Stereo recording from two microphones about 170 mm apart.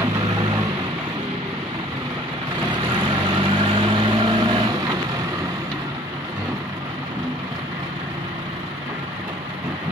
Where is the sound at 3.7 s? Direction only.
30° right (ahead or behind).